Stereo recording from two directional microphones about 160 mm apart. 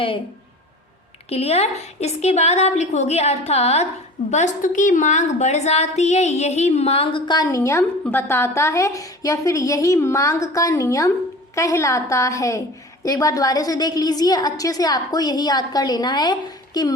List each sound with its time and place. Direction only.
1.3 s a woman's voice: 40° left (ahead or behind)